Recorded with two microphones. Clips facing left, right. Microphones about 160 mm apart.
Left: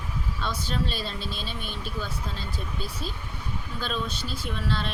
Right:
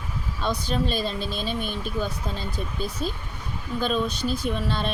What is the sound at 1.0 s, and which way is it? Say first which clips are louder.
Speech: right 6 dB; 45° right (ahead or behind).